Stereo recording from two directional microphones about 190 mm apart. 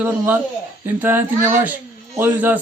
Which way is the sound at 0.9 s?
10° right (ahead or behind).